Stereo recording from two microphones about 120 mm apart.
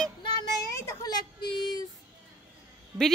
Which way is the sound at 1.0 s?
35° left (ahead or behind).